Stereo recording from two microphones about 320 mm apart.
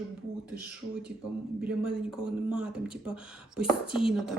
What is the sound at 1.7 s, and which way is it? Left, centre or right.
Speech, centre.